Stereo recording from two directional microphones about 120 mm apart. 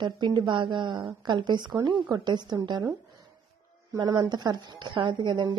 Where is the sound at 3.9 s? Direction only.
35° right (ahead or behind).